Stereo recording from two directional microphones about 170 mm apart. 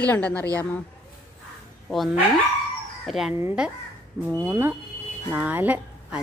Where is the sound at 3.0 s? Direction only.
Centre (ahead or behind).